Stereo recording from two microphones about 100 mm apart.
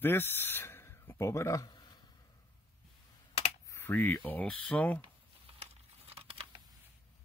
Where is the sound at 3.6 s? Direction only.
25° left (ahead or behind).